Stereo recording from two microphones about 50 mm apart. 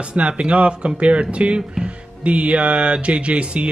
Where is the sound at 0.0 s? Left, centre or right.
Right.